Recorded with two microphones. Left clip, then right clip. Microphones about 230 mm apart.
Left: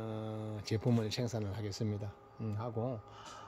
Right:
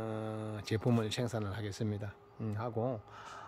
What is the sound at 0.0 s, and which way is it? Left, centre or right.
Speech, centre.